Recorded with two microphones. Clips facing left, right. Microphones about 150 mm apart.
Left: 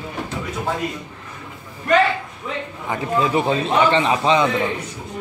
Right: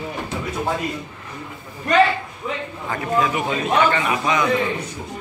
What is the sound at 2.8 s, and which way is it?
A man's voice, 20° left (ahead or behind).